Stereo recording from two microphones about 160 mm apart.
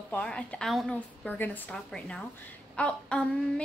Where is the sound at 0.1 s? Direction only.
5° left (ahead or behind).